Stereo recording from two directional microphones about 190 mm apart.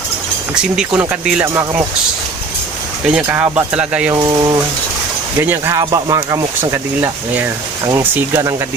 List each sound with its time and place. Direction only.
0.9 s speech: 5° right (ahead or behind)
3.1 s speech: 5° right (ahead or behind)
4.1 s speech: 20° right (ahead or behind)